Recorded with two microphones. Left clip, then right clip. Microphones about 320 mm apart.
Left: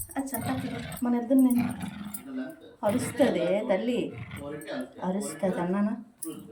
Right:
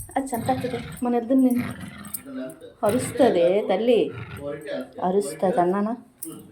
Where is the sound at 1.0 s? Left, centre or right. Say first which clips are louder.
Right 3 dB; centre.